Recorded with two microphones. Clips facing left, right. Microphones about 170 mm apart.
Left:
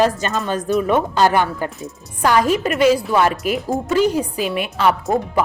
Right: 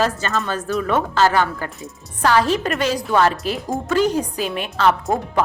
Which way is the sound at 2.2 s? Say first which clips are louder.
Left 1 dB; 10° left (ahead or behind).